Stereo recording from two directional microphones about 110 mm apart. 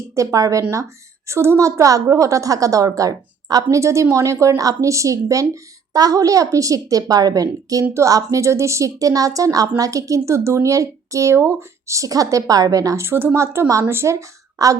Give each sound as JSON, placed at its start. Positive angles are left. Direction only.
{"t": 0.1, "sound": "a woman's voice", "side_deg": -30}